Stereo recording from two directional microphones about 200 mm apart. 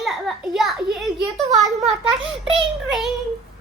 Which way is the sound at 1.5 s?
35° right (ahead or behind).